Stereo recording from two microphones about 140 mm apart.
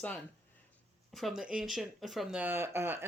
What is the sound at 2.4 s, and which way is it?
Speech, 15° right (ahead or behind).